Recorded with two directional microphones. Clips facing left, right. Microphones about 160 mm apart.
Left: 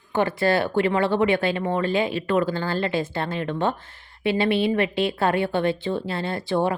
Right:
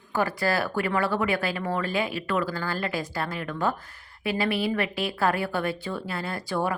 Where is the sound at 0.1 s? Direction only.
25° left (ahead or behind).